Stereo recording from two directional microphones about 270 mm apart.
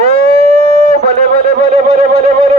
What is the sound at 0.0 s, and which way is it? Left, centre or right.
Music, right.